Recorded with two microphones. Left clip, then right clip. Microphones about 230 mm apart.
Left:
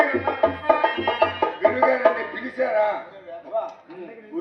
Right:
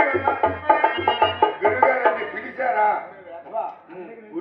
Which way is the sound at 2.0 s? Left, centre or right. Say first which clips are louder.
Left 1 dB; left.